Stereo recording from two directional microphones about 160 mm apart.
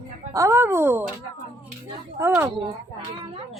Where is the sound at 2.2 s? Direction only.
15° right (ahead or behind).